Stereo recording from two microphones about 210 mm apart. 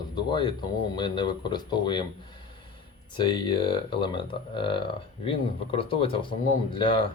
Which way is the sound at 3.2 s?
20° left (ahead or behind).